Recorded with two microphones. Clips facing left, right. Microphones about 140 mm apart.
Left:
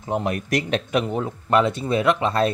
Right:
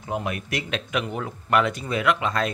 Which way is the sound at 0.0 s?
35° left (ahead or behind).